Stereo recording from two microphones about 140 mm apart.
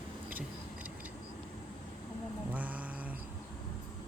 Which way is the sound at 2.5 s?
10° right (ahead or behind).